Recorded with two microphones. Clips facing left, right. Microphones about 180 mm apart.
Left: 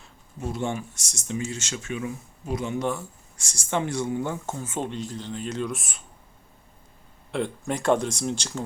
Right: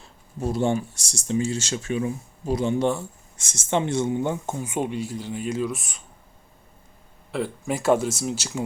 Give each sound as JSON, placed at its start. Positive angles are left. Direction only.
{"t": 0.3, "sound": "speech", "side_deg": -35}
{"t": 7.3, "sound": "speech", "side_deg": 0}